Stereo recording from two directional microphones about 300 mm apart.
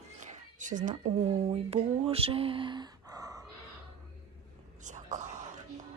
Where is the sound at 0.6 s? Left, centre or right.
Right.